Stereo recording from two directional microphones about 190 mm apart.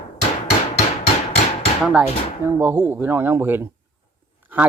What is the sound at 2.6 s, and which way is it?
Speech, 10° right (ahead or behind).